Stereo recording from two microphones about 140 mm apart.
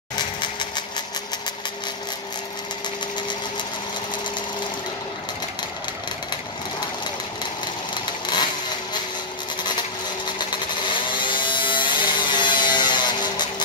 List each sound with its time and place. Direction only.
0.4 s vehicle: 35° left (ahead or behind)
7.9 s a sound: 30° left (ahead or behind)
10.2 s vehicle: 35° left (ahead or behind)